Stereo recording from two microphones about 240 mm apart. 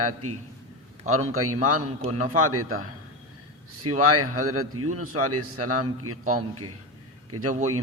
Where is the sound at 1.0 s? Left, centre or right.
Right.